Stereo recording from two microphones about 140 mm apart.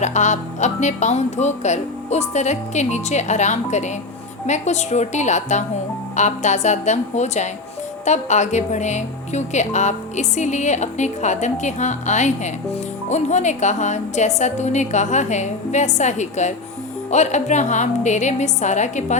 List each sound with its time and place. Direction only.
0.0 s a woman's voice: 60° left (ahead or behind)